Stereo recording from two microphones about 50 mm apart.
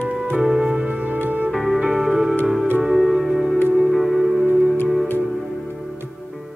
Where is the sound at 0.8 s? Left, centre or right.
Right.